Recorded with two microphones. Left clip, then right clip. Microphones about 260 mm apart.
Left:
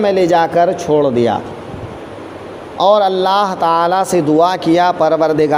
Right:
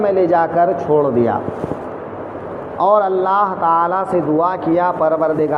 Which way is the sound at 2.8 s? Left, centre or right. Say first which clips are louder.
Left 3 dB; left.